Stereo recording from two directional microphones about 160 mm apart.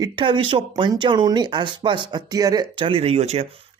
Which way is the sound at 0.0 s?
30° right (ahead or behind).